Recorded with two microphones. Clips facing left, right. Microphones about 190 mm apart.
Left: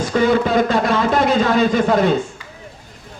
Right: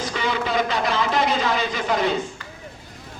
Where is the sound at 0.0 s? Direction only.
45° left (ahead or behind).